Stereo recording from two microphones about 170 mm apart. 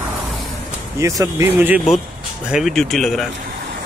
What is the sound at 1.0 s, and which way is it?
Speech, 15° right (ahead or behind).